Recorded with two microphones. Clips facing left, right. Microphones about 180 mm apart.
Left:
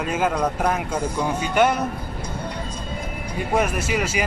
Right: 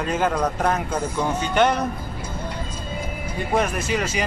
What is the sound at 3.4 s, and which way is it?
Speech, 10° left (ahead or behind).